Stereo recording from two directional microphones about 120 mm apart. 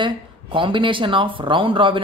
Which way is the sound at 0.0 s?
45° right (ahead or behind).